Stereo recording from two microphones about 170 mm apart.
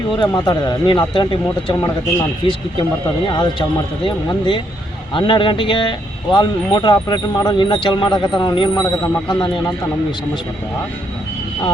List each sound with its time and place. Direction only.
0.2 s speech: 25° left (ahead or behind)